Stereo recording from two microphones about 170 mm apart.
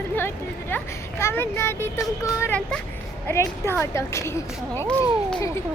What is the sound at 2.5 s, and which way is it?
Speech, 5° left (ahead or behind).